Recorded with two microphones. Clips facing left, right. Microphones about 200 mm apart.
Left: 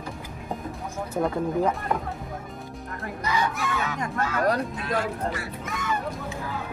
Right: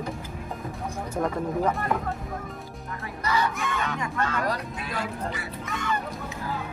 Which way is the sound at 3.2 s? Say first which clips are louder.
Even; 15° left (ahead or behind).